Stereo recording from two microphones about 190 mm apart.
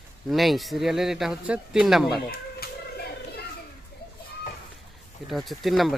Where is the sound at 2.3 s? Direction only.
55° left (ahead or behind).